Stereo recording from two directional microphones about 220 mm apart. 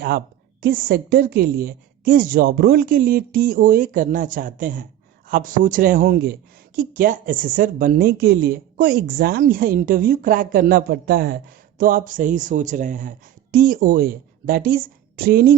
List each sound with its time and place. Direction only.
0.6 s speech: 40° right (ahead or behind)